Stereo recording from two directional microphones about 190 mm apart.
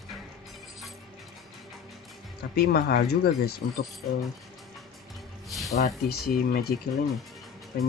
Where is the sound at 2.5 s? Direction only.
55° left (ahead or behind).